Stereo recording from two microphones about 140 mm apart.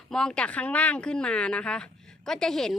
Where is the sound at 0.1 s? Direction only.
5° left (ahead or behind).